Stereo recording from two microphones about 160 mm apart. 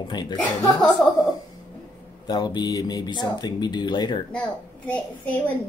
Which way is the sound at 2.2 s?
25° left (ahead or behind).